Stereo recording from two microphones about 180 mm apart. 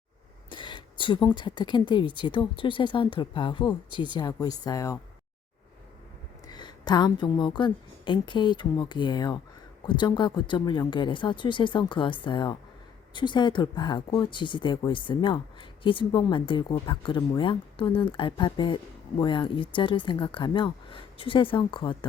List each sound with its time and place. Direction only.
0.5 s speech: 25° left (ahead or behind)
6.5 s speech: 25° left (ahead or behind)